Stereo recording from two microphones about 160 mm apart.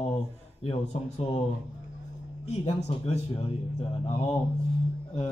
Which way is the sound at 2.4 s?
40° left (ahead or behind).